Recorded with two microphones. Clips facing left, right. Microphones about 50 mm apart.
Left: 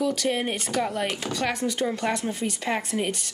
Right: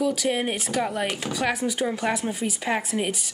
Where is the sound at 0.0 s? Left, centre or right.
Centre.